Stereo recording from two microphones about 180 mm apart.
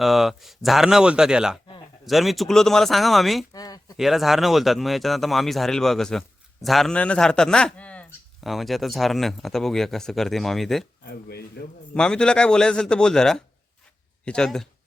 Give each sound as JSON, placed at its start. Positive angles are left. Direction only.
{"t": 0.0, "sound": "speech", "side_deg": 0}
{"t": 3.5, "sound": "a sound", "side_deg": 20}
{"t": 3.9, "sound": "speech", "side_deg": 0}
{"t": 11.0, "sound": "speech", "side_deg": 60}
{"t": 11.9, "sound": "speech", "side_deg": 5}